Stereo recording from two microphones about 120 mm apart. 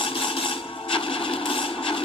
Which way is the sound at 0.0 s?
50° left (ahead or behind).